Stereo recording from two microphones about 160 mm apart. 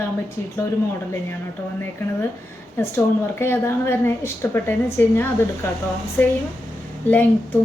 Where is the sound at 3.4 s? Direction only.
15° left (ahead or behind).